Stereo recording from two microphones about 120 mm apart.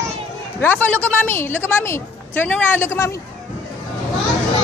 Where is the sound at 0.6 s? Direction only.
15° left (ahead or behind).